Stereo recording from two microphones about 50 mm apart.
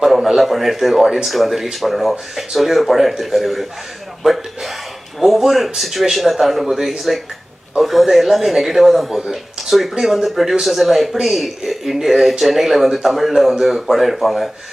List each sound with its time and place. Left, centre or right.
0.0 s speech: centre
4.2 s a sound: centre
5.2 s speech: centre